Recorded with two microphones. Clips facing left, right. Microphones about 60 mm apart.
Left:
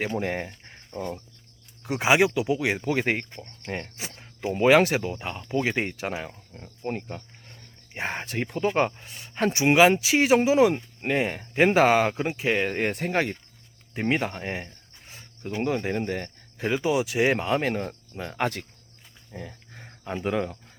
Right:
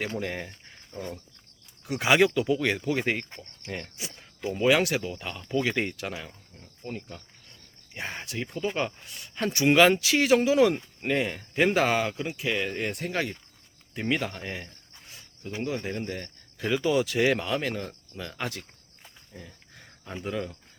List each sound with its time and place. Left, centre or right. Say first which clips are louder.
0.2 s speech: left 4 dB; left
1.8 s speech: left 1 dB; left
2.8 s speech: left 2 dB; left
8.6 s speech: left 6 dB; left
15.6 s speech: left 5 dB; left
18.3 s speech: left 9 dB; left
19.7 s cricket: left 6 dB; left